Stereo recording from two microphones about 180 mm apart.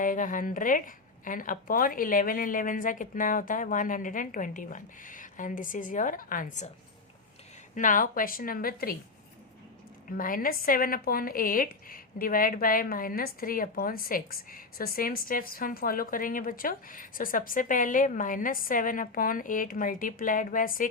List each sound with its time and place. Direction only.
0.0 s speech: 45° left (ahead or behind)
7.8 s speech: 50° left (ahead or behind)
10.1 s speech: 50° left (ahead or behind)